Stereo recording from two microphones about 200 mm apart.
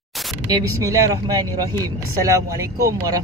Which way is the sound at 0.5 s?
15° right (ahead or behind).